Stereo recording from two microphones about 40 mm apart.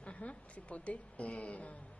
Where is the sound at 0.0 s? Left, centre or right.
Left.